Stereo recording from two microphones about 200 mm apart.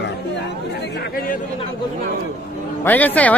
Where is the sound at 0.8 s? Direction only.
55° left (ahead or behind).